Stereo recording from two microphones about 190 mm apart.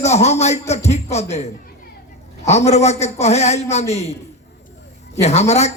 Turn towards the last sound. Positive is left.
turn(degrees=35)  # may be behind; listen again after turning